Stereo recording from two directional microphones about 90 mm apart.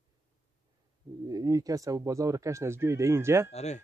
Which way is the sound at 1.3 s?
40° right (ahead or behind).